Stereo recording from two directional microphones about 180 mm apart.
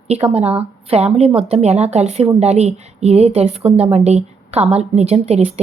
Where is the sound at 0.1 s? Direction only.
35° right (ahead or behind).